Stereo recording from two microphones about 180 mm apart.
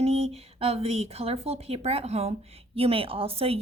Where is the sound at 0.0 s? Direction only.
35° right (ahead or behind).